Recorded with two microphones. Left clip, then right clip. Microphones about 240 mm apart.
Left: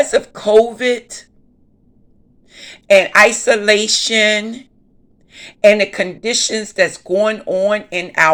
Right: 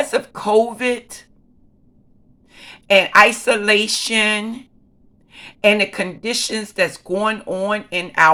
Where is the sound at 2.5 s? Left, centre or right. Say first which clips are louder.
Left 4 dB; right.